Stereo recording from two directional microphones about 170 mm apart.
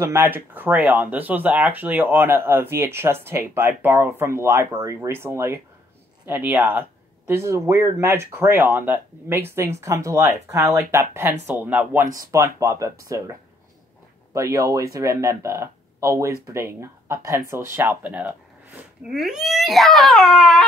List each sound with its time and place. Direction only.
0.0 s speech: 15° right (ahead or behind)